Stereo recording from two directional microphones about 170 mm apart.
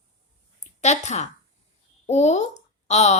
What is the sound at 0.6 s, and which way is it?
A woman's voice, 45° left (ahead or behind).